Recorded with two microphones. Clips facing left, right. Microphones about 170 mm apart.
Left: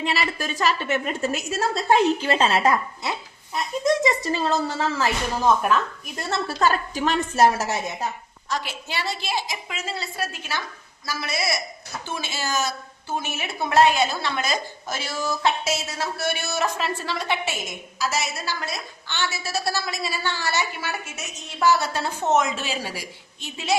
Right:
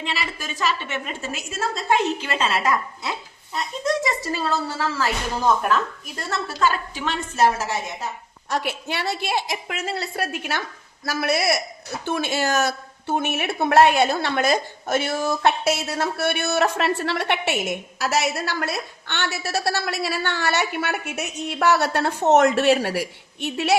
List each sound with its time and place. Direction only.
0.2 s speech: centre (ahead or behind)
1.0 s a woman's voice: 40° left (ahead or behind)
3.5 s a sound: 20° left (ahead or behind)
5.4 s speech: centre (ahead or behind)
6.1 s a woman's voice: 25° left (ahead or behind)
6.6 s a woman's voice: 40° left (ahead or behind)
8.4 s a woman's voice: 60° right (ahead or behind)